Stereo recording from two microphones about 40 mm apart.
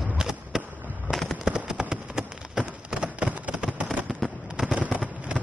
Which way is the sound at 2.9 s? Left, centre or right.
Right.